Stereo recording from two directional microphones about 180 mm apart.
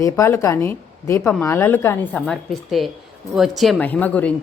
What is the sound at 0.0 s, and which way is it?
Speech, 15° left (ahead or behind).